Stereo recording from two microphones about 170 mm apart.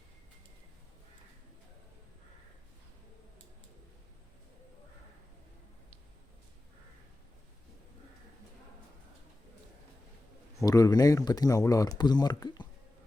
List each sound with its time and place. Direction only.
10.6 s speech: 20° left (ahead or behind)